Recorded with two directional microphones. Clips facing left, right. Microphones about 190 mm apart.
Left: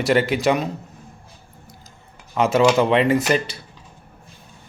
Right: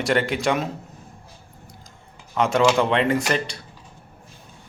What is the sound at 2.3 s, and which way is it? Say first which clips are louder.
Speech: left 2 dB; 5° left (ahead or behind).